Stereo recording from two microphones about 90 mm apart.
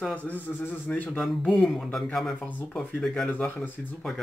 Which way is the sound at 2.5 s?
20° left (ahead or behind).